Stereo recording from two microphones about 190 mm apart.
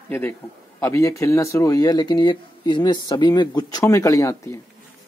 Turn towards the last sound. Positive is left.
turn(degrees=15)  # may be behind; listen again after turning